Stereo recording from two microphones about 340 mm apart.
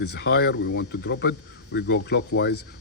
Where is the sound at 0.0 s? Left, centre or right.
Left.